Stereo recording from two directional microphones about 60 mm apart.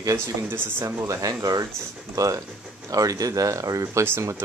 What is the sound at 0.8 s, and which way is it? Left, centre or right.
Speech, right.